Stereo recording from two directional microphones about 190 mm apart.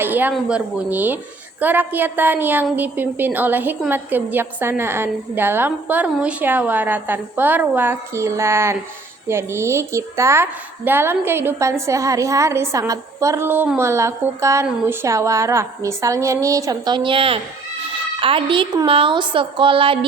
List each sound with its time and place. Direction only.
0.0 s a woman's voice: 10° right (ahead or behind); by 20.1 s 30° right (ahead or behind)